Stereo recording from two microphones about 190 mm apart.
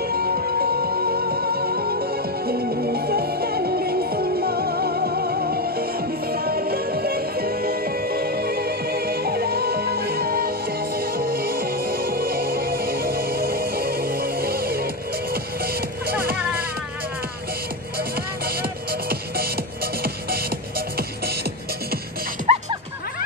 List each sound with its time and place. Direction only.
0.0 s music: 55° right (ahead or behind)
17.9 s music: 55° right (ahead or behind)
22.5 s music: 35° right (ahead or behind)